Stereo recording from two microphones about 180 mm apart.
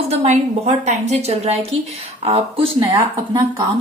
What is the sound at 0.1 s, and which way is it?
A woman's voice, 35° right (ahead or behind).